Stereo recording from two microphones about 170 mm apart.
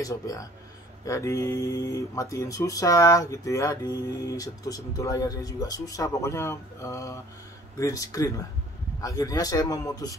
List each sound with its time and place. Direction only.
0.0 s speech: 20° left (ahead or behind)